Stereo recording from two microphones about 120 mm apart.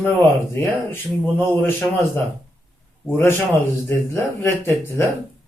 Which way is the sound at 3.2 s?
20° left (ahead or behind).